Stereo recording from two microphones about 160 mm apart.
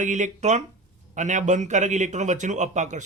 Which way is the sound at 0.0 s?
50° right (ahead or behind).